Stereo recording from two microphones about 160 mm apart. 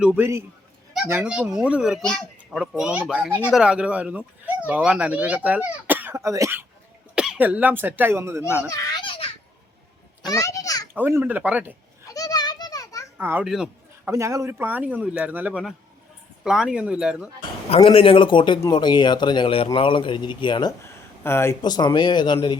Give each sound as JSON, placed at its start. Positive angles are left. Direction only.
{"t": 0.0, "sound": "speech", "side_deg": -15}
{"t": 8.7, "sound": "babbling", "side_deg": 25}
{"t": 10.2, "sound": "a sound", "side_deg": 20}
{"t": 10.9, "sound": "speech", "side_deg": -15}
{"t": 12.0, "sound": "children playing", "side_deg": 20}
{"t": 13.1, "sound": "a child's voice", "side_deg": -15}
{"t": 13.5, "sound": "a sound", "side_deg": -5}
{"t": 14.1, "sound": "speech", "side_deg": -20}
{"t": 17.7, "sound": "a man's voice", "side_deg": 40}
{"t": 20.9, "sound": "a sound", "side_deg": 15}
{"t": 21.6, "sound": "a man's voice", "side_deg": 25}